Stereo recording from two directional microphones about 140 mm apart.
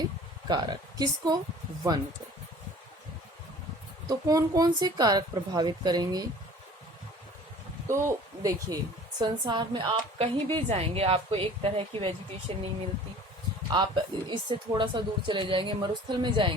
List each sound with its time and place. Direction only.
0.0 s speech: 30° right (ahead or behind)
4.1 s speech: 25° right (ahead or behind)
7.9 s a woman's voice: 20° right (ahead or behind); by 12.6 s 45° right (ahead or behind)
13.7 s a woman's voice: 35° right (ahead or behind)